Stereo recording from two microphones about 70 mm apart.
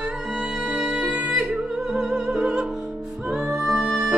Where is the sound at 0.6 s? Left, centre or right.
Centre.